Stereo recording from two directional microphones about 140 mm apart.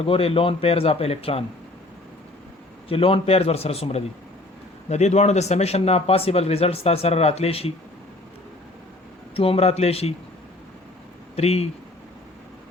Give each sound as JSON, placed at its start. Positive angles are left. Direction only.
{"t": 0.0, "sound": "speech", "side_deg": 45}
{"t": 2.9, "sound": "speech", "side_deg": 40}
{"t": 9.3, "sound": "speech", "side_deg": 45}
{"t": 11.3, "sound": "speech", "side_deg": 45}